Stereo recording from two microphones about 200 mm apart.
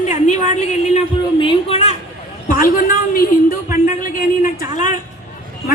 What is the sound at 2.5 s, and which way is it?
A woman's voice, 45° left (ahead or behind).